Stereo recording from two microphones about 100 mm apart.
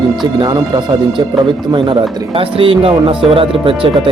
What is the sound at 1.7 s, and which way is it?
Speech, 55° right (ahead or behind).